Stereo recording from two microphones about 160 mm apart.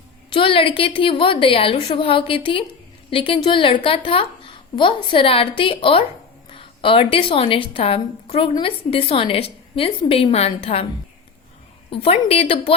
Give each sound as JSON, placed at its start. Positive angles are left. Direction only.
{"t": 0.3, "sound": "a woman's voice", "side_deg": 35}
{"t": 11.9, "sound": "a woman's voice", "side_deg": 40}